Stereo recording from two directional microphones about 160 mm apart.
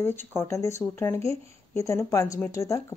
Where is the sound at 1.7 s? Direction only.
20° left (ahead or behind).